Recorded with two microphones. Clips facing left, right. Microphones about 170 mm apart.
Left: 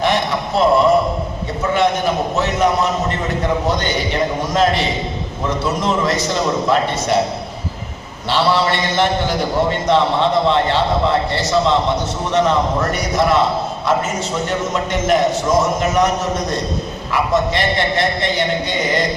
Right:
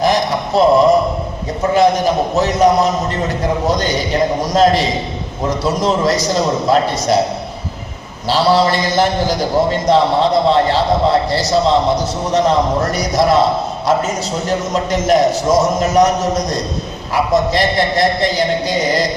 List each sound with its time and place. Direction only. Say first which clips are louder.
0.0 s a sound: right 3 dB; 40° right (ahead or behind)
1.7 s a man's voice: right 4 dB; 35° right (ahead or behind)
8.3 s a man's voice: right 3 dB; 40° right (ahead or behind)
14.4 s a man's voice: right 5 dB; 40° right (ahead or behind)